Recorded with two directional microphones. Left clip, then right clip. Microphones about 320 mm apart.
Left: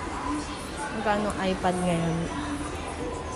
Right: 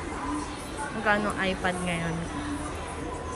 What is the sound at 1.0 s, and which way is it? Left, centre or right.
Speech, centre.